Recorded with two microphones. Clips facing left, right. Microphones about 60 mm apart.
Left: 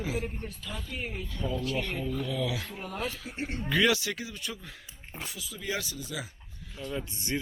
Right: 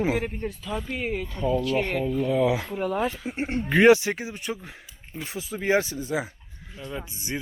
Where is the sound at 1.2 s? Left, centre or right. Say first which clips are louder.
Right 7 dB; right.